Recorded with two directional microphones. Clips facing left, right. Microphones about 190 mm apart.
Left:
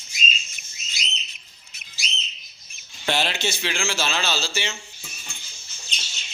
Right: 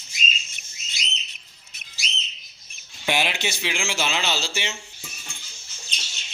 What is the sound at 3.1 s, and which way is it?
A man's voice, 15° right (ahead or behind).